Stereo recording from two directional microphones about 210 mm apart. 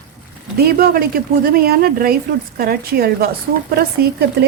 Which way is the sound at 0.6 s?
45° right (ahead or behind).